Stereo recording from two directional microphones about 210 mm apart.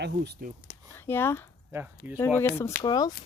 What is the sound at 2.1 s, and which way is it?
Speech, 10° left (ahead or behind).